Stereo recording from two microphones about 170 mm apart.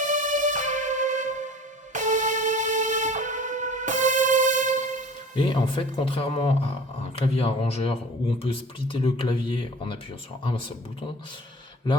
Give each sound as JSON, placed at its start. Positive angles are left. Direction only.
{"t": 0.0, "sound": "music", "side_deg": -50}
{"t": 5.3, "sound": "speech", "side_deg": 30}